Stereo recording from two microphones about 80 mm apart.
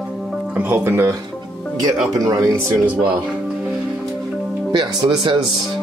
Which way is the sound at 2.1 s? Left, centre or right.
Right.